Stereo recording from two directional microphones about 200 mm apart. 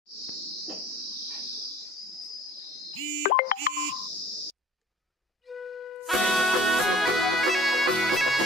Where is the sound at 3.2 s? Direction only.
45° left (ahead or behind).